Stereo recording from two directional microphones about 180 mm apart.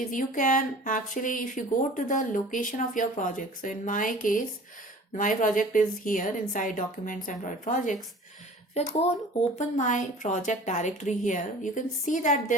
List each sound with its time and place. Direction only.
0.0 s a woman's voice: 45° left (ahead or behind)